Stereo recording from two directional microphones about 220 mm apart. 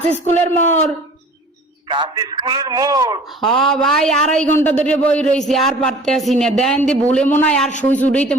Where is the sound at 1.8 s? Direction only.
20° right (ahead or behind).